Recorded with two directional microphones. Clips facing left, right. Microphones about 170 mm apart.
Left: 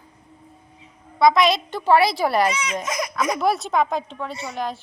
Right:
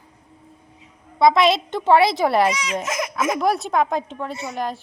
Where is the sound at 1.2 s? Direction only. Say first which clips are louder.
Right 1 dB; 25° right (ahead or behind).